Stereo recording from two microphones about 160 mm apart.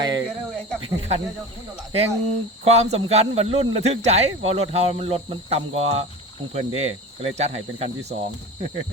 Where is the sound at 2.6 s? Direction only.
40° right (ahead or behind).